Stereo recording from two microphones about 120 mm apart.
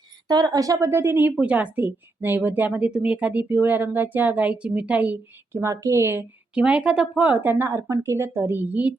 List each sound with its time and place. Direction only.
0.3 s a woman's voice: 35° right (ahead or behind); by 5.1 s 10° right (ahead or behind)
5.5 s a woman's voice: 25° right (ahead or behind)
6.5 s a woman's voice: 10° right (ahead or behind)